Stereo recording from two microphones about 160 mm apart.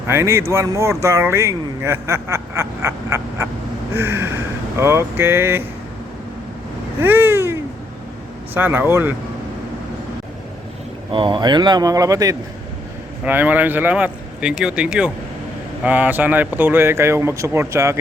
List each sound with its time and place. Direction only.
0.1 s speech: 15° right (ahead or behind)
7.0 s cat: 15° right (ahead or behind)
8.5 s speech: 10° right (ahead or behind)
11.1 s speech: 30° right (ahead or behind)
13.2 s speech: 10° right (ahead or behind)